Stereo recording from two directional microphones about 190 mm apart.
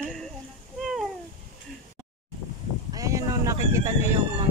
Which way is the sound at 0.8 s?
Centre (ahead or behind).